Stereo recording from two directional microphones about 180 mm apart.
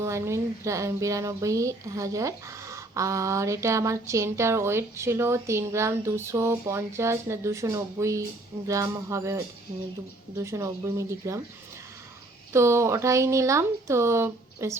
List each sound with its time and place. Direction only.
0.0 s speech: 15° right (ahead or behind)
12.5 s speech: 15° right (ahead or behind)